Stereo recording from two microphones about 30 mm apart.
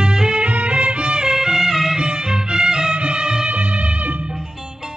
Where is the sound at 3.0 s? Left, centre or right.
Right.